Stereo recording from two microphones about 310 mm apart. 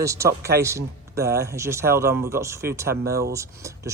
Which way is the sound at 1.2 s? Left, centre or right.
Right.